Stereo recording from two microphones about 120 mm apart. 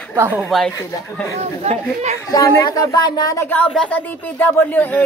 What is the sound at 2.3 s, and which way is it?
Speech, 25° left (ahead or behind).